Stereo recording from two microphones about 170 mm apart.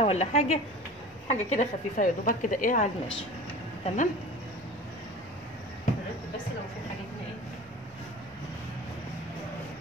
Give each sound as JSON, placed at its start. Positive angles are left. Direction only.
{"t": 0.0, "sound": "a woman's voice", "side_deg": 40}